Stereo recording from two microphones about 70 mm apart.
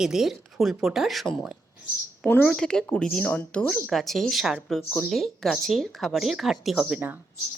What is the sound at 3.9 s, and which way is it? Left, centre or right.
A woman's voice, centre.